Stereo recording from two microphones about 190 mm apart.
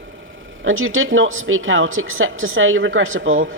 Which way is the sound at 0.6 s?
90° right.